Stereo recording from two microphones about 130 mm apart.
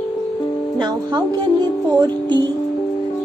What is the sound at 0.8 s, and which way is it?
Speech, 35° right (ahead or behind).